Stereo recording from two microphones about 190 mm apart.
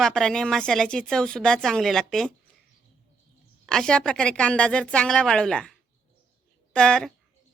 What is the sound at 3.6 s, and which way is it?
Speech, 5° left (ahead or behind).